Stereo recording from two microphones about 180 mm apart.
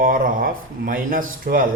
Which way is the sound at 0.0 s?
50° right (ahead or behind).